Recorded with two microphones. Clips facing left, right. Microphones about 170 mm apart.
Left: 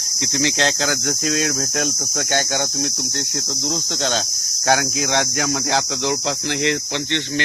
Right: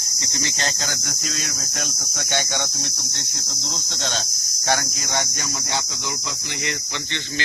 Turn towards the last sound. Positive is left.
turn(degrees=70)  # may be behind; listen again after turning